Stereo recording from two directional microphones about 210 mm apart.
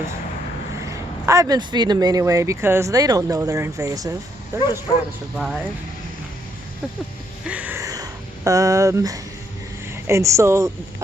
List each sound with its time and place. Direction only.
0.9 s speech: 15° right (ahead or behind)
7.4 s a sound: 5° right (ahead or behind)
9.9 s speech: 15° right (ahead or behind)